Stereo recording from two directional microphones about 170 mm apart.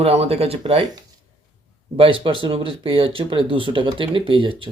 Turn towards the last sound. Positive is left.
turn(degrees=-30)  # may be behind; listen again after turning